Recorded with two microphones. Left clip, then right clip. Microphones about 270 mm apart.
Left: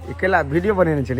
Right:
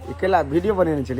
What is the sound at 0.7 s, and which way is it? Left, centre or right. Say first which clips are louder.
Speech: left 4 dB; right.